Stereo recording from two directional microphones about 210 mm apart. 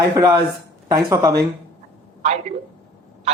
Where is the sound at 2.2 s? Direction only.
30° right (ahead or behind).